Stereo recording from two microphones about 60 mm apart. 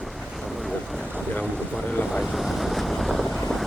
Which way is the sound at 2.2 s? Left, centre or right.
Centre.